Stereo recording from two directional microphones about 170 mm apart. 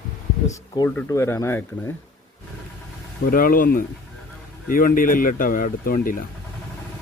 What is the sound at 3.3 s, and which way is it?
Speech, 55° left (ahead or behind).